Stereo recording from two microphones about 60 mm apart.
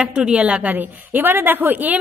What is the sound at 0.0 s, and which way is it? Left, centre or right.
A woman's voice, centre.